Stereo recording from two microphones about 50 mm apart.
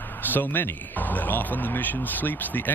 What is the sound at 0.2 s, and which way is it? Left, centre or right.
Speech, left.